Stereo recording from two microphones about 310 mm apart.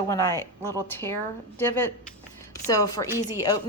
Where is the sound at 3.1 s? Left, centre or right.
Centre.